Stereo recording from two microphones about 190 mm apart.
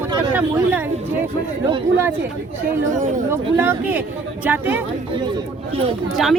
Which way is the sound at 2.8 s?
40° right (ahead or behind).